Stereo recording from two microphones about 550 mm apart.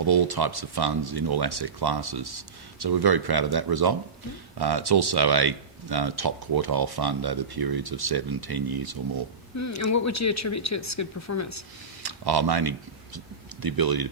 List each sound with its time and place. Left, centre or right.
0.0 s speech: right
9.6 s speech: left
12.0 s speech: right